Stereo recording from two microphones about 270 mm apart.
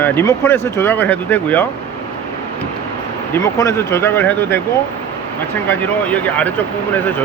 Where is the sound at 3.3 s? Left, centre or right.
Centre.